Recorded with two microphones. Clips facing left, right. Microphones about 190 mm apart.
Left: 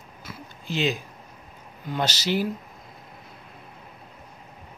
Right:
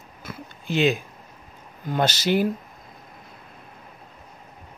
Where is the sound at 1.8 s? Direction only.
50° right (ahead or behind).